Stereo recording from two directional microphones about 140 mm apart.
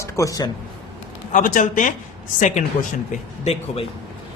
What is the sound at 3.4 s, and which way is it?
Speech, 50° left (ahead or behind).